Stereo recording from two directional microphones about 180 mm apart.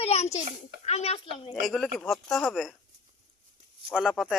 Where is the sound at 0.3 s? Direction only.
35° left (ahead or behind).